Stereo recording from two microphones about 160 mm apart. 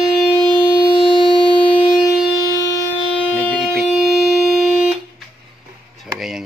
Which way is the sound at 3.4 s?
10° left (ahead or behind).